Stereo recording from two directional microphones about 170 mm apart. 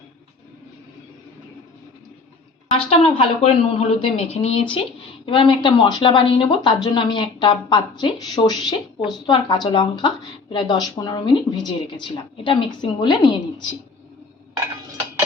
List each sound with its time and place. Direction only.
2.6 s a woman's voice: 35° left (ahead or behind)